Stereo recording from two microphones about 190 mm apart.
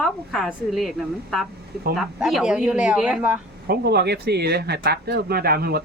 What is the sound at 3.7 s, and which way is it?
Speech, 60° right (ahead or behind).